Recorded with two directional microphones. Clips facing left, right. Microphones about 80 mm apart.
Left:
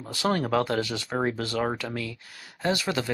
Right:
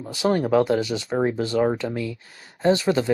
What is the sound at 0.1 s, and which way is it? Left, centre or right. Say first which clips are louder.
Speech: right 5 dB; centre.